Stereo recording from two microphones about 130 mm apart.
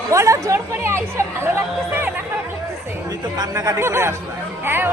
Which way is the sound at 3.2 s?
30° right (ahead or behind).